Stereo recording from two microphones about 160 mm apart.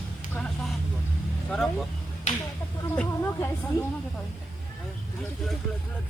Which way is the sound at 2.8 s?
15° left (ahead or behind).